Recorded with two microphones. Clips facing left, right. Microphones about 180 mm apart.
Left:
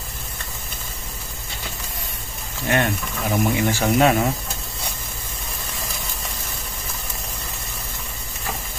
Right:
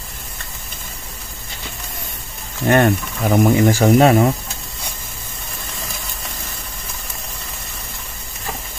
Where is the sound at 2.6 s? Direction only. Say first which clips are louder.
Right 7 dB; 50° right (ahead or behind).